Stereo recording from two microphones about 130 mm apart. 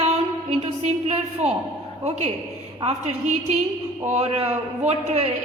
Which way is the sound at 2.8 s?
50° right (ahead or behind).